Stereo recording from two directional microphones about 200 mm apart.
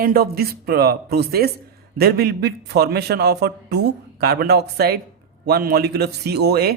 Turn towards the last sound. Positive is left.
turn(degrees=-55)  # may be behind; listen again after turning